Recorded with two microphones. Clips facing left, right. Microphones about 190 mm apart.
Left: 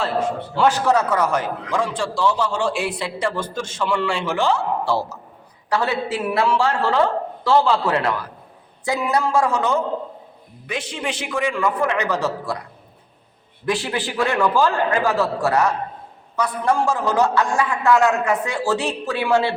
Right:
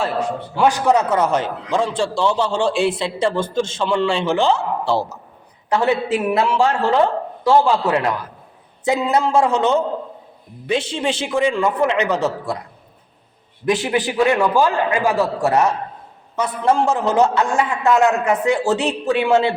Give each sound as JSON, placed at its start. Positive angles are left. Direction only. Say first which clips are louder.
{"t": 0.5, "sound": "a man's voice", "louder": "right 2 dB", "side_deg": -15}
{"t": 13.7, "sound": "a man's voice", "louder": "right 4 dB", "side_deg": -20}